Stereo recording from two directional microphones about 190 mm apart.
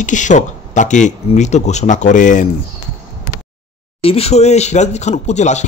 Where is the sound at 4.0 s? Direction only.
30° left (ahead or behind).